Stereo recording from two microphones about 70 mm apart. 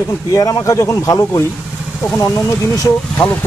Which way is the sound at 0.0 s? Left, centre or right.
Left.